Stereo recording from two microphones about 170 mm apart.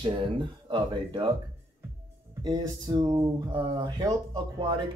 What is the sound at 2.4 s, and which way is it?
Speech, 25° right (ahead or behind).